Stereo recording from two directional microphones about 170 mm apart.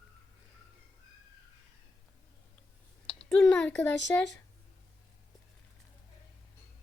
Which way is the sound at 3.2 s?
5° left (ahead or behind).